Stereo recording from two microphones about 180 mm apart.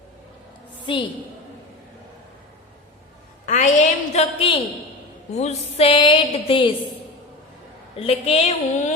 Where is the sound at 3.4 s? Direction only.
40° left (ahead or behind).